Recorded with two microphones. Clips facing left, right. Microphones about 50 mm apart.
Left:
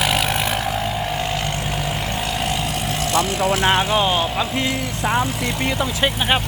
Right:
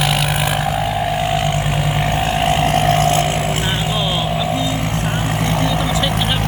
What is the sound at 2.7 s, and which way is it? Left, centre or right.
Vehicle, right.